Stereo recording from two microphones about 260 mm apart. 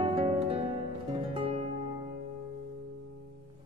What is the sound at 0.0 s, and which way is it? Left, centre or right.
Music, right.